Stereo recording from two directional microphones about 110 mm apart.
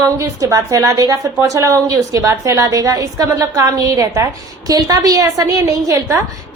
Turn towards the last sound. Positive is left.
turn(degrees=-30)  # may be behind; listen again after turning